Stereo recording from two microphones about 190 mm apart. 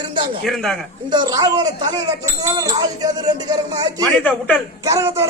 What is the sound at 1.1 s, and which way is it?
Speech, 20° right (ahead or behind).